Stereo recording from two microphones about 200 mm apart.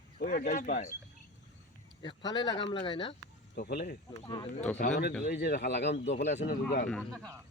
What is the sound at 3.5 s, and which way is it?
Speech, 50° left (ahead or behind).